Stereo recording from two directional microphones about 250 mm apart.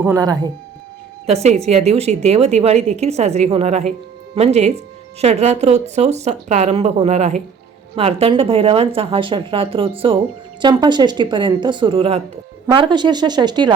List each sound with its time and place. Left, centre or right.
0.0 s speech: centre
1.3 s a woman's voice: right